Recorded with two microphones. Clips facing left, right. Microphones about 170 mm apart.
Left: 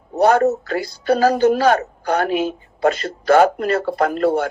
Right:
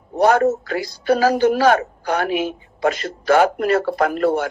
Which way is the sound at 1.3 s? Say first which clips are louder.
Even; 30° left (ahead or behind).